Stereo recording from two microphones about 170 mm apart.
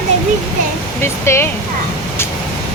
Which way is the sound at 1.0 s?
15° left (ahead or behind).